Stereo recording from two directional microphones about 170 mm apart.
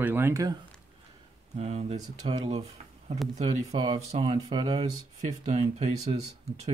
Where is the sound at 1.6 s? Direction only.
40° right (ahead or behind).